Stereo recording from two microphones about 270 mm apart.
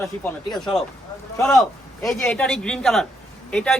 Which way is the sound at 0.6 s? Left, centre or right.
Centre.